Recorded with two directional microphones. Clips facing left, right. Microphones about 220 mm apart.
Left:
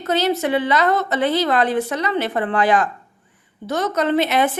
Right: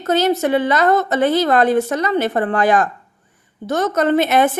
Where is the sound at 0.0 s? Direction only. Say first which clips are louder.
Right 3 dB; 45° right (ahead or behind).